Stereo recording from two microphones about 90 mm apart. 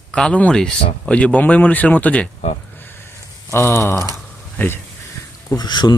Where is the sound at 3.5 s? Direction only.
25° left (ahead or behind).